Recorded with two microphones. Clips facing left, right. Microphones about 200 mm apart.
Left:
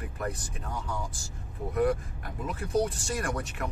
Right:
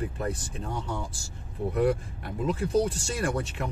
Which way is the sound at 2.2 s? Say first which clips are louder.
Right 7 dB; 30° right (ahead or behind).